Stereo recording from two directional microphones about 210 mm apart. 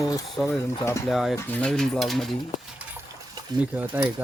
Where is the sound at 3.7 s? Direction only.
5° right (ahead or behind).